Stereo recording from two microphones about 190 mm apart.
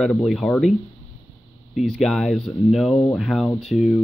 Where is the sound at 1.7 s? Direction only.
Centre (ahead or behind).